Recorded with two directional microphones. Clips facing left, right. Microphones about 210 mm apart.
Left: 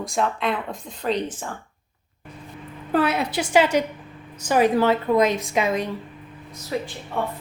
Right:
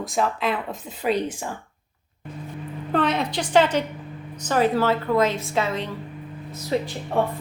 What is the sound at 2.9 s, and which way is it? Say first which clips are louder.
A woman's voice: left 1 dB; 10° left (ahead or behind).